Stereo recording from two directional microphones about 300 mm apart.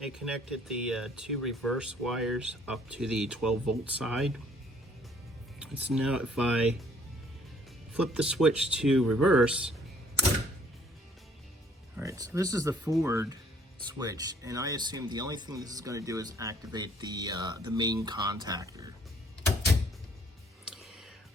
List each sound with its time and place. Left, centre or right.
0.0 s speech: centre
5.5 s speech: centre
7.9 s speech: centre
11.9 s speech: centre